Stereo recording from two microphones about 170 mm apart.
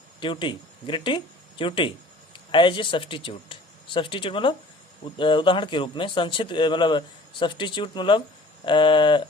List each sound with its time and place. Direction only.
0.2 s speech: 30° left (ahead or behind)